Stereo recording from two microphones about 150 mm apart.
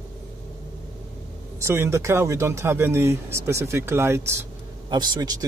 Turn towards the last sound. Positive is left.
turn(degrees=-25)  # may be behind; listen again after turning